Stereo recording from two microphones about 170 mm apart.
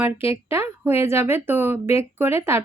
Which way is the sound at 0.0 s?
15° right (ahead or behind).